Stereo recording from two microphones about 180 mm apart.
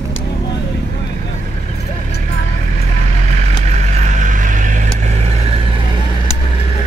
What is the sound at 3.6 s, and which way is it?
Vehicle, 40° right (ahead or behind).